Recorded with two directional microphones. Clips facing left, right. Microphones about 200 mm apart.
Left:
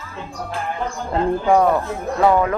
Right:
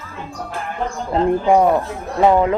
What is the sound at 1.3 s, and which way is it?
Speech, 20° right (ahead or behind).